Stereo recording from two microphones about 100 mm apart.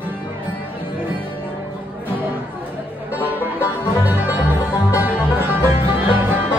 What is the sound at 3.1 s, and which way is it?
Music, 20° right (ahead or behind).